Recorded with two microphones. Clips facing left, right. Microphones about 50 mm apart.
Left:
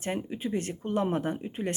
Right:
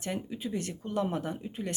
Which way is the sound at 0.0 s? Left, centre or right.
Left.